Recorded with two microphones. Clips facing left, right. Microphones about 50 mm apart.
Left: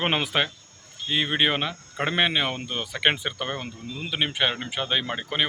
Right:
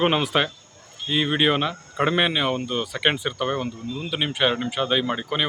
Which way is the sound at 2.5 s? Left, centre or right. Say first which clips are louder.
Right 5 dB; left.